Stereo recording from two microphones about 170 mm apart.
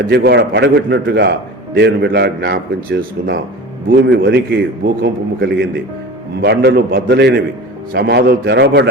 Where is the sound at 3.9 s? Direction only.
90° right.